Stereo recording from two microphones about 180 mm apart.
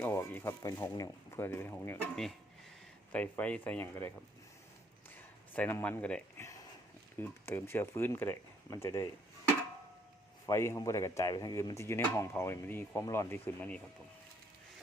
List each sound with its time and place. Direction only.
0.0 s speech: 10° left (ahead or behind)
5.1 s a sound: 10° left (ahead or behind)
7.2 s speech: 15° left (ahead or behind)
10.4 s speech: 15° left (ahead or behind)